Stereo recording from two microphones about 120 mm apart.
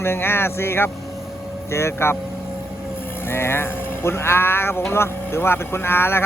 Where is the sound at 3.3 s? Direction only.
20° left (ahead or behind).